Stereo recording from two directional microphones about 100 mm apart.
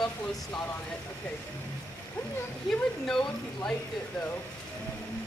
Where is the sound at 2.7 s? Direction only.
5° left (ahead or behind).